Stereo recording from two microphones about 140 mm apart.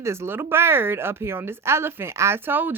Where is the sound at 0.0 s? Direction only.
20° right (ahead or behind).